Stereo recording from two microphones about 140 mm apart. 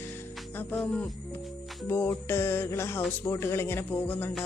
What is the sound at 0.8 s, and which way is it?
Speech, 5° left (ahead or behind).